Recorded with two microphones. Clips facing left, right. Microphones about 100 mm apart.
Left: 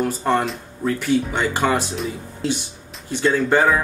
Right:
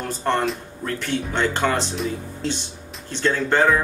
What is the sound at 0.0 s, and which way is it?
Speech, 5° left (ahead or behind).